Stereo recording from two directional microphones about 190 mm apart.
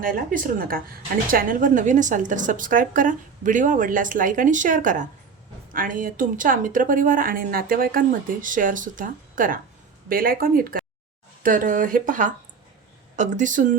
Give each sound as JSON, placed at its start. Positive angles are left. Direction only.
{"t": 0.0, "sound": "a woman's voice", "side_deg": -50}